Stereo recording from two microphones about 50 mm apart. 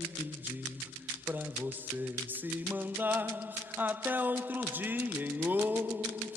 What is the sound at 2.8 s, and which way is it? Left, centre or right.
Music, right.